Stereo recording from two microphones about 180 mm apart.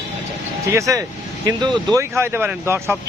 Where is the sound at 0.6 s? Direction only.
15° right (ahead or behind).